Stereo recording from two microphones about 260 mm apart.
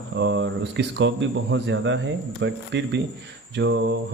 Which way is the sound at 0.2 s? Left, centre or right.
Right.